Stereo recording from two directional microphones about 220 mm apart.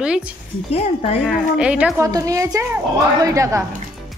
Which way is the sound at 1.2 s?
Centre (ahead or behind).